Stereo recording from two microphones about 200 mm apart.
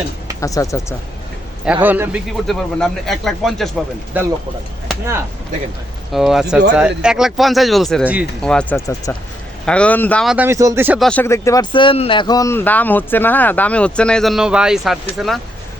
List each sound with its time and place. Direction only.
0.3 s speech: 15° left (ahead or behind)
1.6 s a man's voice: 10° right (ahead or behind)
6.1 s a man's voice: centre (ahead or behind)
10.3 s speech: 10° right (ahead or behind)
11.0 s a man's voice: 10° left (ahead or behind)